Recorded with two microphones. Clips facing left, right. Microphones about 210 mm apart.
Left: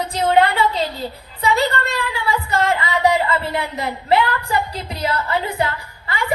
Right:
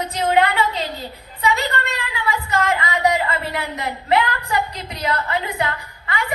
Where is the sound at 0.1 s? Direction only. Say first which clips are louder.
Left 2 dB; 30° left (ahead or behind).